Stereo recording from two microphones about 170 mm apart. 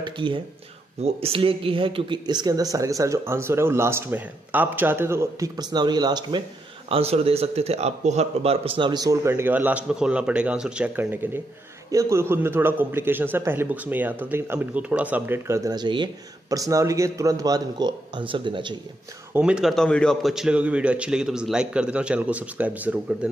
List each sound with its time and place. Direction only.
0.0 s speech: 30° right (ahead or behind)
6.9 s a man's voice: 35° right (ahead or behind)
19.3 s a man's voice: 5° right (ahead or behind)